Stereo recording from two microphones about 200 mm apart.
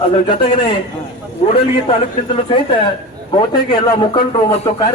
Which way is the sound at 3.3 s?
20° left (ahead or behind).